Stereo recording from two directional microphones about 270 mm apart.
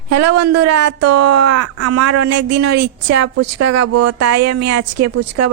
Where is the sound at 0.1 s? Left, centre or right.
Right.